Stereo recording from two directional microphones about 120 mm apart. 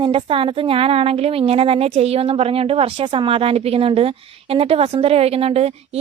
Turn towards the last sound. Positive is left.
turn(degrees=-55)  # may be behind; listen again after turning